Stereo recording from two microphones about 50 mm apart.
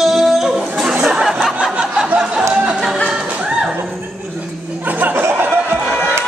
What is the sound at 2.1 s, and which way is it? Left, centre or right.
Music, centre.